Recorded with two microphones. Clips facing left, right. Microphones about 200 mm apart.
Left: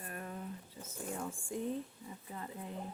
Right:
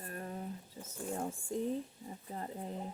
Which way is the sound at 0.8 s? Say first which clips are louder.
Right 1 dB; 40° right (ahead or behind).